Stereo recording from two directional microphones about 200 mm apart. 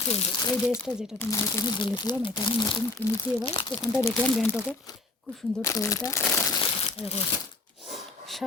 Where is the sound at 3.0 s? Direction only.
10° left (ahead or behind).